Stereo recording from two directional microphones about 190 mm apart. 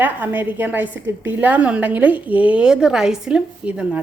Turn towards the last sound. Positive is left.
turn(degrees=-5)  # may be behind; listen again after turning